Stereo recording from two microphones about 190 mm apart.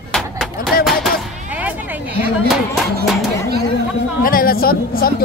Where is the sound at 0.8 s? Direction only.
5° right (ahead or behind).